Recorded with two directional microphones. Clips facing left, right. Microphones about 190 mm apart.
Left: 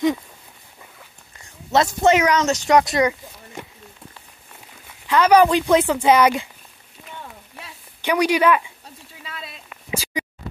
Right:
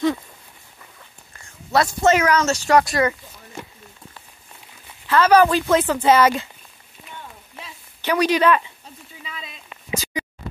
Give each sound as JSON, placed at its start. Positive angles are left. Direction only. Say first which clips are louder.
{"t": 1.7, "sound": "speech", "louder": "left 1 dB", "side_deg": 20}
{"t": 5.0, "sound": "speech", "louder": "even", "side_deg": 15}
{"t": 7.6, "sound": "a sound", "louder": "left 1 dB", "side_deg": 10}